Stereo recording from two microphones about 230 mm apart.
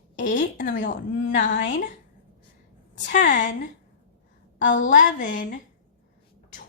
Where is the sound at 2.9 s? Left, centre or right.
Left.